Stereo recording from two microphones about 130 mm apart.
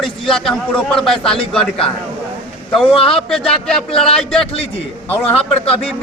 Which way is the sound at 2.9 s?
45° left (ahead or behind).